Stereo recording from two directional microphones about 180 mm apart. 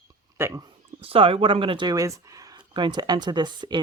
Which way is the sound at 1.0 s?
30° right (ahead or behind).